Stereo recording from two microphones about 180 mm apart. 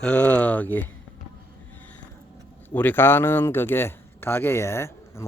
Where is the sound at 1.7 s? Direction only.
10° left (ahead or behind).